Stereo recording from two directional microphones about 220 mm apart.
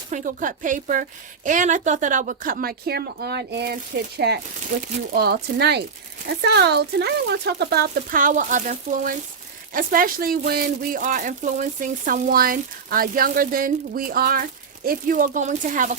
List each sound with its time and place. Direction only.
0.1 s speech: 35° right (ahead or behind)
5.1 s speech: 45° right (ahead or behind)